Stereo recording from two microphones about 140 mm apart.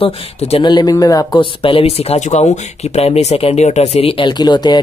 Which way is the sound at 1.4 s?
40° left (ahead or behind).